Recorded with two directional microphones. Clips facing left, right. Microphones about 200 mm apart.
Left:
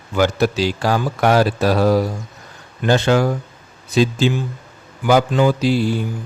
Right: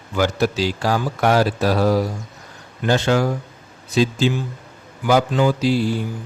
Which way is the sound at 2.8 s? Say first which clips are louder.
Left 2 dB; 60° left (ahead or behind).